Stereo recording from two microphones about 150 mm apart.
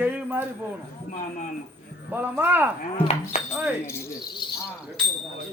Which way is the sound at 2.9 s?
45° left (ahead or behind).